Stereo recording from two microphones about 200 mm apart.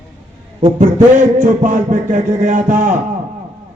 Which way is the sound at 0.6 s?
35° right (ahead or behind).